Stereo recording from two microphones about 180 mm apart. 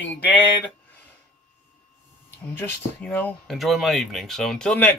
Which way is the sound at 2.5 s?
10° left (ahead or behind).